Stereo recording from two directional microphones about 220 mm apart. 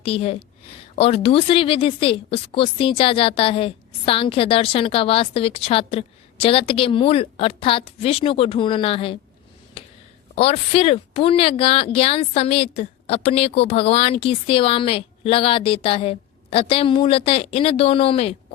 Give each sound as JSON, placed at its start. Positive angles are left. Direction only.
{"t": 0.0, "sound": "a woman's voice", "side_deg": 25}
{"t": 10.3, "sound": "a woman's voice", "side_deg": 25}